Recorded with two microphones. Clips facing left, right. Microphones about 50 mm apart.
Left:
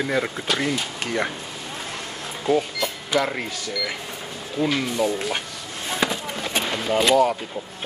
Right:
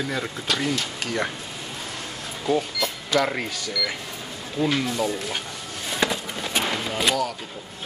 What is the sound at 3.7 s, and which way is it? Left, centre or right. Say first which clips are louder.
Speech: even; centre.